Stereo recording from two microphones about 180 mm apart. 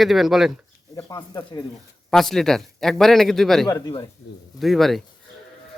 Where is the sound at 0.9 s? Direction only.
20° left (ahead or behind).